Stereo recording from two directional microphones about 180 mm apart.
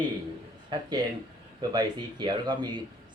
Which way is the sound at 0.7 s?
25° right (ahead or behind).